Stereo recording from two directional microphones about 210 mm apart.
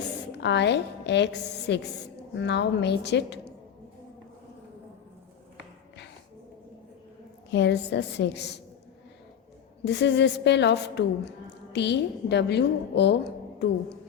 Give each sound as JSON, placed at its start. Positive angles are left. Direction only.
{"t": 0.3, "sound": "a woman's voice", "side_deg": 55}
{"t": 7.5, "sound": "a woman's voice", "side_deg": 55}
{"t": 9.8, "sound": "a woman's voice", "side_deg": 55}